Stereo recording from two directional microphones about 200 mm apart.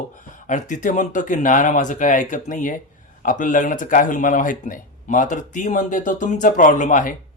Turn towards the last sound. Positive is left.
turn(degrees=40)  # may be behind; listen again after turning